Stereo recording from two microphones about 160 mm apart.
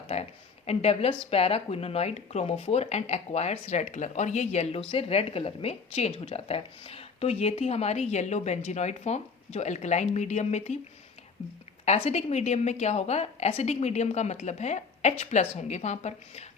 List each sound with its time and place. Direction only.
0.1 s a woman's voice: 40° left (ahead or behind)
11.9 s a woman's voice: 40° left (ahead or behind)